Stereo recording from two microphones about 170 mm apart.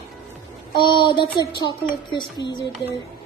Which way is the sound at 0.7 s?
30° left (ahead or behind).